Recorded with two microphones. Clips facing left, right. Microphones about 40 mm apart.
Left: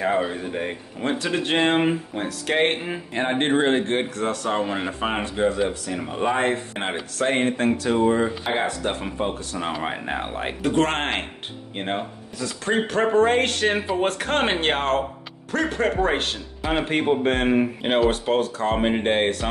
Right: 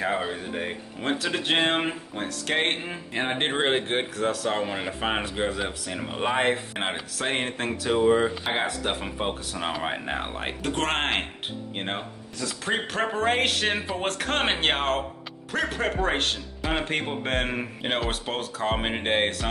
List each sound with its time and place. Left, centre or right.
0.0 s a man's voice: centre